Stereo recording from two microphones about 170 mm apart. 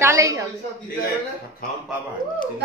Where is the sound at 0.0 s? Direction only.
15° right (ahead or behind).